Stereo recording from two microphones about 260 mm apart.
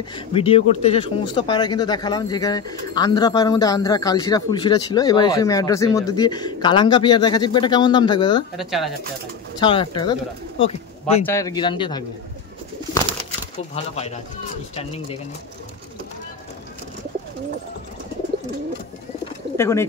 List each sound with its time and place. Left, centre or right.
0.1 s speech: left
8.5 s speech: centre
9.6 s speech: centre
11.2 s speech: centre
13.9 s speech: left
19.5 s speech: centre